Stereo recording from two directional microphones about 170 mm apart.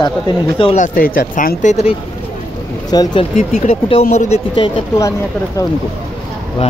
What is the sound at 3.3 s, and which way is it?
Speech, 45° left (ahead or behind).